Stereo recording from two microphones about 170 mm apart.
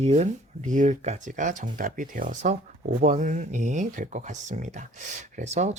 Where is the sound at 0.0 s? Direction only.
40° right (ahead or behind).